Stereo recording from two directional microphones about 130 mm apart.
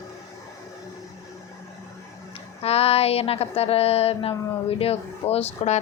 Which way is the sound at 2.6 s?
50° left (ahead or behind).